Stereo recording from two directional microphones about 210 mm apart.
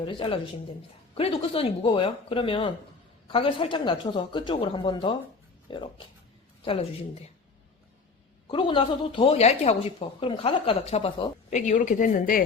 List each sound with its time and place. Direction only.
0.0 s speech: 25° left (ahead or behind)
8.4 s speech: 25° left (ahead or behind); by 12.4 s 40° left (ahead or behind)